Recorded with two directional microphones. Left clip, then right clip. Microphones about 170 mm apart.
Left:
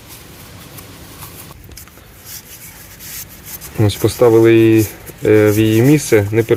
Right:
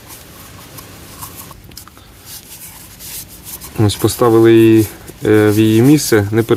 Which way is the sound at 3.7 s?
15° right (ahead or behind).